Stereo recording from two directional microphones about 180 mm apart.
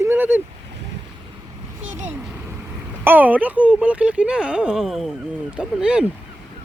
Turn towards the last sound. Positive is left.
turn(degrees=-5)  # may be behind; listen again after turning